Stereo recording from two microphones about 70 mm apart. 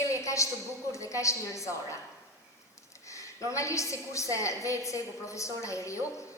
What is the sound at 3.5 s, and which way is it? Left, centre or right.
A woman's voice, left.